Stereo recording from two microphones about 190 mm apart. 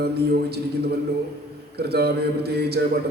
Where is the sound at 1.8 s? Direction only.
60° right (ahead or behind).